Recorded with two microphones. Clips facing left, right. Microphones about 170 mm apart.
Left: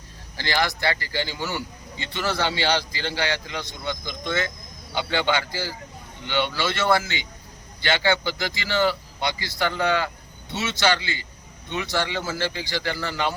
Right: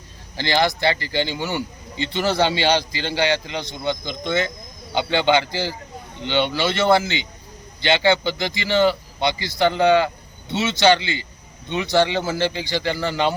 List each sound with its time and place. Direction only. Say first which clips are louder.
0.3 s speech: right 5 dB; 25° right (ahead or behind)